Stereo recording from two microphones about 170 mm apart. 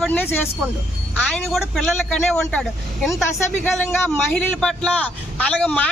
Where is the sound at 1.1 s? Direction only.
Centre (ahead or behind).